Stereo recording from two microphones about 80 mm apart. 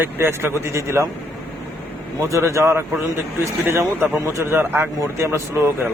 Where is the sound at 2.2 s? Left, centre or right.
Right.